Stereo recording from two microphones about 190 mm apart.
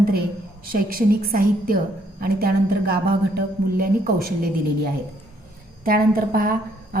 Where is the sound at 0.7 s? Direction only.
50° right (ahead or behind).